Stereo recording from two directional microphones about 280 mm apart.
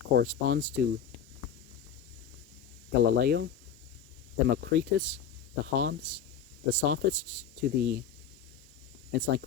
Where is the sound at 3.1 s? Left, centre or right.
Right.